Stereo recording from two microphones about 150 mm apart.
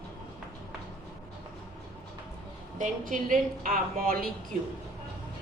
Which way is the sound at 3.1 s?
65° right (ahead or behind).